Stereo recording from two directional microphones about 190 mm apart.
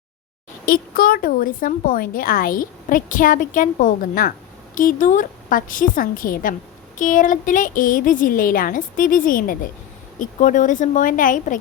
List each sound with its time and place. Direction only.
0.6 s a woman's voice: 50° left (ahead or behind)